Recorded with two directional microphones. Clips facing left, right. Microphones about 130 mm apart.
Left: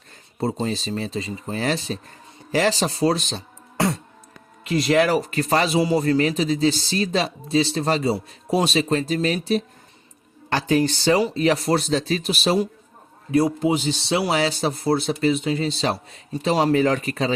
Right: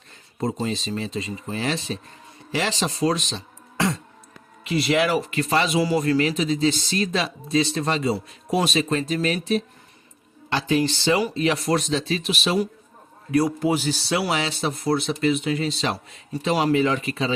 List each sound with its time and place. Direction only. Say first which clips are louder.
0.3 s speech: left 1 dB; 30° left (ahead or behind)
4.7 s speech: left 2 dB; 40° left (ahead or behind)
13.3 s speech: left 1 dB; 25° left (ahead or behind); by 17.3 s 45° left (ahead or behind)